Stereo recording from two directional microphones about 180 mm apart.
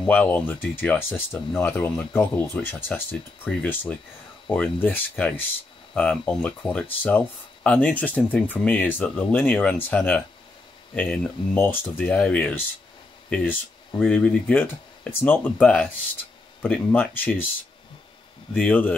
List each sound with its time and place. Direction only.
0.0 s speech: 5° left (ahead or behind)
18.5 s speech: 5° left (ahead or behind)